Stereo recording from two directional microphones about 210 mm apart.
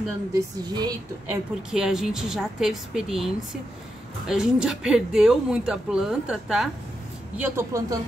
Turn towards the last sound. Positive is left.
turn(degrees=-15)  # may be behind; listen again after turning